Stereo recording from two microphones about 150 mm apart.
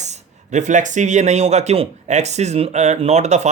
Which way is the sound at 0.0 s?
50° right (ahead or behind).